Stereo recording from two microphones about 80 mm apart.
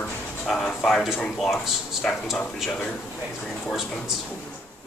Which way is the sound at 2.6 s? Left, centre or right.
Centre.